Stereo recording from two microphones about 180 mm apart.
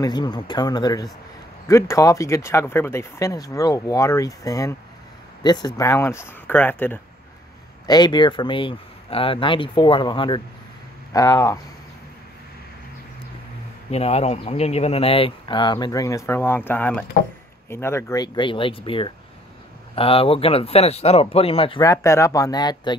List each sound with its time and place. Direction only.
0.0 s speech: 25° left (ahead or behind)
7.8 s speech: 25° left (ahead or behind)
13.8 s speech: 35° left (ahead or behind)
21.8 s speech: 15° left (ahead or behind)